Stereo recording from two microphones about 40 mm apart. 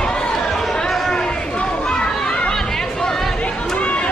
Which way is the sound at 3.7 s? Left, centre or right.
Left.